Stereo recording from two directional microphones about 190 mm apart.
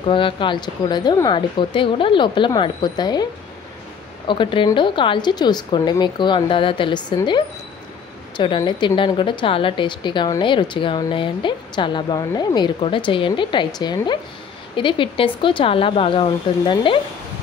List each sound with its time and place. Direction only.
0.0 s a woman's voice: 25° left (ahead or behind)
4.3 s a woman's voice: 25° left (ahead or behind)